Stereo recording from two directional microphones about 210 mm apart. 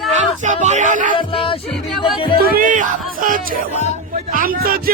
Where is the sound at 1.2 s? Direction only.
25° left (ahead or behind).